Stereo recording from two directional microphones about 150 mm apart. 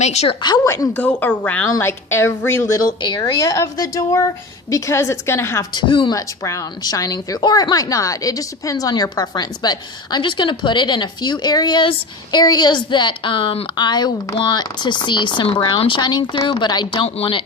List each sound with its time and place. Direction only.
0.0 s a woman's voice: 45° left (ahead or behind)
0.4 s a woman's voice: 30° left (ahead or behind)
0.7 s a woman's voice: 15° left (ahead or behind)
5.7 s speech: 35° left (ahead or behind)
6.1 s a woman's voice: 20° left (ahead or behind)